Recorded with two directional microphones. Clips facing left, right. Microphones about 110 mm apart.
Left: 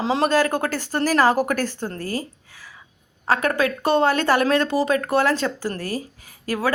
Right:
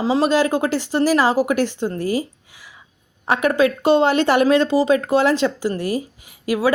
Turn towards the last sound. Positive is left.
turn(degrees=-15)  # may be behind; listen again after turning